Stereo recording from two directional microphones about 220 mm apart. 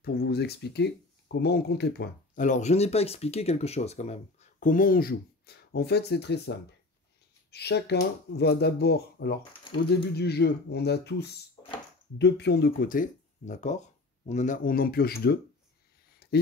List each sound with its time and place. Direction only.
0.0 s speech: 45° left (ahead or behind)
7.5 s speech: 50° left (ahead or behind)
16.2 s a sound: 45° left (ahead or behind)